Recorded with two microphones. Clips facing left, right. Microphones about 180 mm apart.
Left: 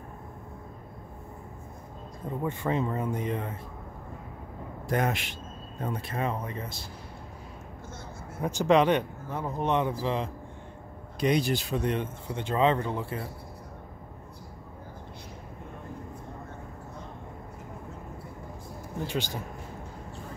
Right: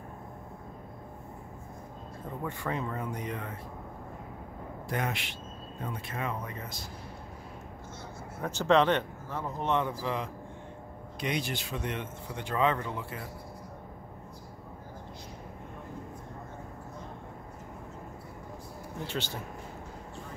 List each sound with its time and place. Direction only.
2.4 s speech: 25° left (ahead or behind)
4.8 s speech: 45° left (ahead or behind); by 6.9 s 30° left (ahead or behind)
8.4 s speech: 15° left (ahead or behind)
11.1 s speech: 35° left (ahead or behind)
19.0 s speech: 15° left (ahead or behind)